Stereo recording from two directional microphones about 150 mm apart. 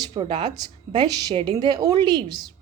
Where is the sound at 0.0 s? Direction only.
30° right (ahead or behind).